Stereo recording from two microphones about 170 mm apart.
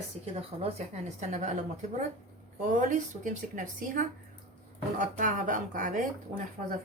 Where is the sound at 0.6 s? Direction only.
40° right (ahead or behind).